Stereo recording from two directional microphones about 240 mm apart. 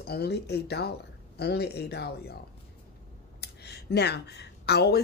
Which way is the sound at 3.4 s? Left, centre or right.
Left.